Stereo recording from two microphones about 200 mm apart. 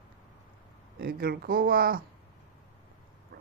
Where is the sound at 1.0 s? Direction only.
50° right (ahead or behind).